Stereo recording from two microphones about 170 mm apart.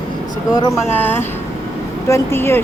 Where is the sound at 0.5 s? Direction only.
20° left (ahead or behind).